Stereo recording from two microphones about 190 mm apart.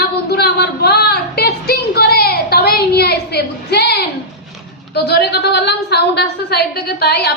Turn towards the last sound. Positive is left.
turn(degrees=60)  # may be behind; listen again after turning